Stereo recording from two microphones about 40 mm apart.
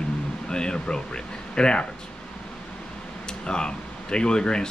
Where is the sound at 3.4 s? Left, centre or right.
Left.